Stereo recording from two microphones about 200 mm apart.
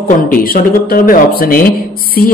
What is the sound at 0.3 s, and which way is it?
A man's voice, 45° left (ahead or behind).